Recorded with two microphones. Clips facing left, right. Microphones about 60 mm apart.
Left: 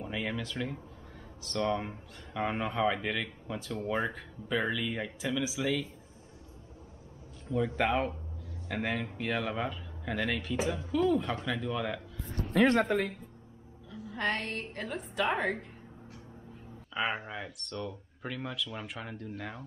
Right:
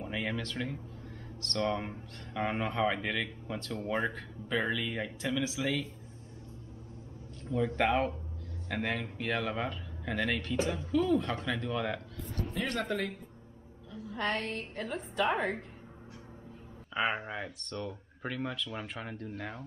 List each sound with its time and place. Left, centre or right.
0.0 s speech: centre
7.4 s a man's voice: centre
12.6 s speech: left
13.9 s speech: centre
16.9 s speech: centre